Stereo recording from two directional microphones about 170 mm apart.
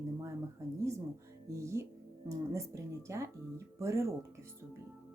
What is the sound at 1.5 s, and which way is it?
Speech, 20° right (ahead or behind).